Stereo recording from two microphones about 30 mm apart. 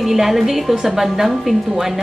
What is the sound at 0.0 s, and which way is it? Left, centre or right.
Speech, centre.